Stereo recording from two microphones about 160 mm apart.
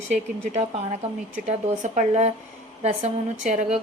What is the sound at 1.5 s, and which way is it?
A woman's voice, 45° right (ahead or behind).